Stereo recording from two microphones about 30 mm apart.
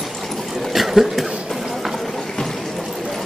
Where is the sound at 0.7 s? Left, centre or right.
Centre.